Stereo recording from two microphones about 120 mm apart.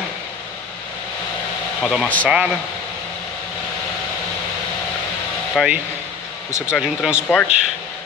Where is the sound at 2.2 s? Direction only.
10° right (ahead or behind).